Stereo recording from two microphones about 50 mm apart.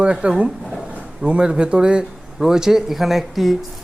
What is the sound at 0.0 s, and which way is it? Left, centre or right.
A man's voice, right.